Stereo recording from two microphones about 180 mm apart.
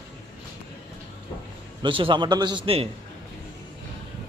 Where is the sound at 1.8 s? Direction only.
30° right (ahead or behind).